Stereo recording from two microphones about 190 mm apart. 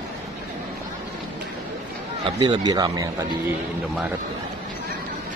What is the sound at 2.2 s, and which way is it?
Speech, 25° right (ahead or behind).